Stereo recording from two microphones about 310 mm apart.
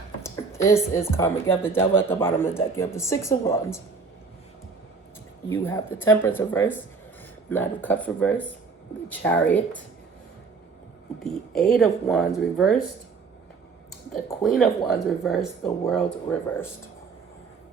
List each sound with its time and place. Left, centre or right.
0.2 s a sound: centre
0.9 s speech: centre
5.5 s speech: centre
11.2 s speech: centre
14.1 s speech: centre